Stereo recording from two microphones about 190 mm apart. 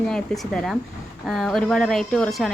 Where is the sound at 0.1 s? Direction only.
Centre (ahead or behind).